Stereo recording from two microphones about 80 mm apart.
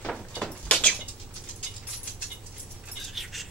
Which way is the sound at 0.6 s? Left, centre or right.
Centre.